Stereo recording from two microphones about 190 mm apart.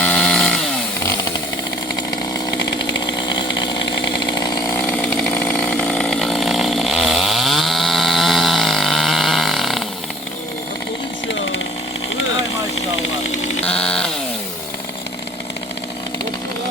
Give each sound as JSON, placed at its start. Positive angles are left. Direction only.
{"t": 0.0, "sound": "chainsaw", "side_deg": 5}
{"t": 3.2, "sound": "chainsaw", "side_deg": 20}
{"t": 13.7, "sound": "a sound", "side_deg": 5}